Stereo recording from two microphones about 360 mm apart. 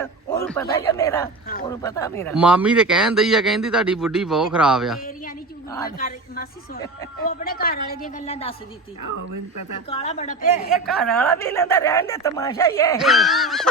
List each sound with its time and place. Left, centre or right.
0.0 s speech: centre
4.9 s a sound: left
6.0 s a woman's voice: left
9.0 s speech: right
9.9 s a woman's voice: centre
10.7 s a woman's voice: centre